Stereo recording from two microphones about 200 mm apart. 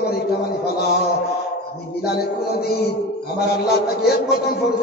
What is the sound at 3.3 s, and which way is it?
Speech, 55° left (ahead or behind).